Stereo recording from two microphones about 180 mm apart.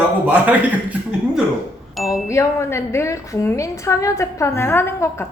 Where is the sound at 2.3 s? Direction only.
15° left (ahead or behind).